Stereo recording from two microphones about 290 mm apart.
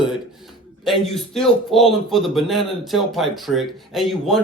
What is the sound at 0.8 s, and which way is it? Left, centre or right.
Speech, centre.